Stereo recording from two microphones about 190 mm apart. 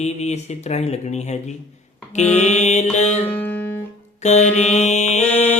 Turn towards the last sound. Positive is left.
turn(degrees=35)  # may be behind; listen again after turning